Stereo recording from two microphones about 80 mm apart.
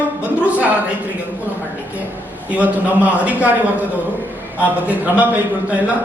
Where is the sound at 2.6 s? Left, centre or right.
Centre.